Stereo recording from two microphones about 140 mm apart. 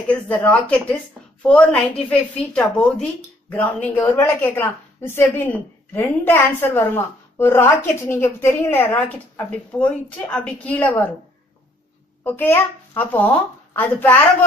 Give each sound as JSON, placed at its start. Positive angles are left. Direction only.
{"t": 0.1, "sound": "a woman's voice", "side_deg": 10}
{"t": 12.2, "sound": "a child's voice", "side_deg": 15}